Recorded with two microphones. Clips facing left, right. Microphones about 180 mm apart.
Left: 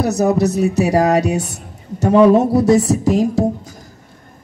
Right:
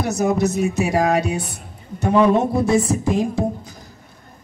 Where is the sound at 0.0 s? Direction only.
35° left (ahead or behind).